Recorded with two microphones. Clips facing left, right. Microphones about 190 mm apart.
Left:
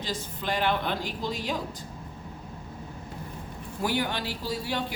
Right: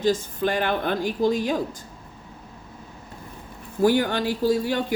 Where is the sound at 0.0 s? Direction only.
50° right (ahead or behind).